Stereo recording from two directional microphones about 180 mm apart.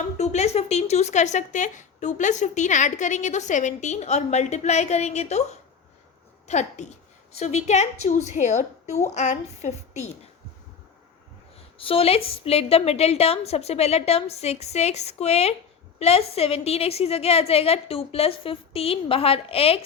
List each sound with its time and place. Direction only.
0.2 s a woman's voice: 40° left (ahead or behind)
6.5 s a woman's voice: 40° left (ahead or behind)
11.8 s a woman's voice: 30° left (ahead or behind)